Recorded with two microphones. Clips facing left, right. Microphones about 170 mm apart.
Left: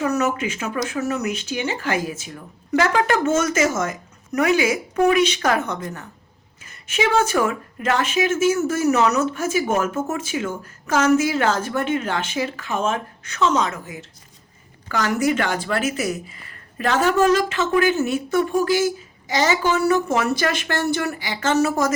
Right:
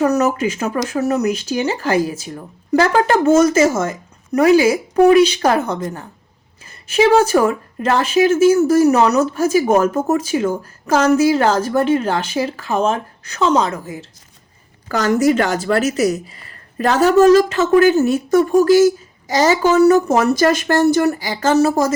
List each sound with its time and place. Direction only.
0.0 s speech: 35° right (ahead or behind)